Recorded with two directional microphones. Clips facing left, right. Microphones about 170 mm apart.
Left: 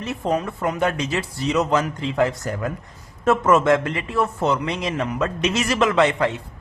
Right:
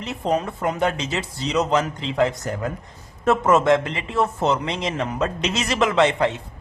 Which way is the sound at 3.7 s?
20° right (ahead or behind).